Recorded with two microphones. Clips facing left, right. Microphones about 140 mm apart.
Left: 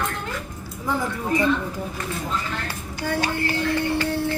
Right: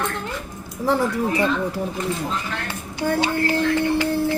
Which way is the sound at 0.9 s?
75° right (ahead or behind).